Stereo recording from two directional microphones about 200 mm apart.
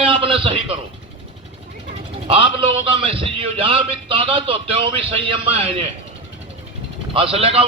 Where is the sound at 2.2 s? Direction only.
25° right (ahead or behind).